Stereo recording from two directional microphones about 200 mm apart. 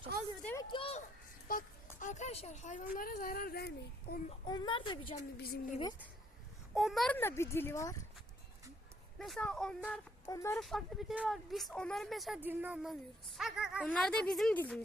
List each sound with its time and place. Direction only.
0.1 s speech: 50° right (ahead or behind)
0.7 s a woman's voice: 30° left (ahead or behind)
1.5 s speech: 40° left (ahead or behind)
4.3 s a woman's voice: 20° left (ahead or behind)
5.4 s speech: 50° left (ahead or behind)
6.7 s a child's voice: centre (ahead or behind); by 8.0 s 15° left (ahead or behind)
9.1 s speech: centre (ahead or behind)
10.2 s a child's voice: 15° left (ahead or behind)
10.6 s speech: centre (ahead or behind)